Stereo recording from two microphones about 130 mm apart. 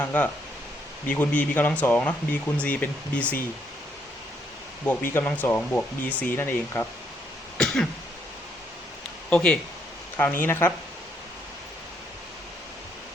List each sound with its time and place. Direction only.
0.0 s speech: 15° left (ahead or behind)
4.9 s speech: 15° left (ahead or behind)
7.6 s cough: 5° left (ahead or behind)
9.3 s speech: 5° left (ahead or behind)